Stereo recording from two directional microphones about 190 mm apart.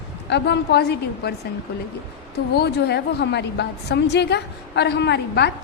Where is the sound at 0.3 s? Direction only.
65° left (ahead or behind).